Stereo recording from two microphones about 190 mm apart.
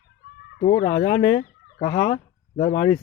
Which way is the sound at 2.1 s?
30° left (ahead or behind).